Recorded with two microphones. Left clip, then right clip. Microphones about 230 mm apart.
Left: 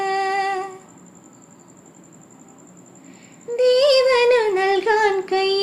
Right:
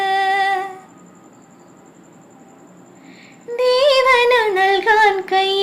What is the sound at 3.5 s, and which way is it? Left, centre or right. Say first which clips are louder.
Music: right 1 dB; centre.